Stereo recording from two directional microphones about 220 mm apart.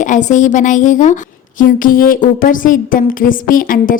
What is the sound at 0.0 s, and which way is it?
A woman's voice, 35° left (ahead or behind).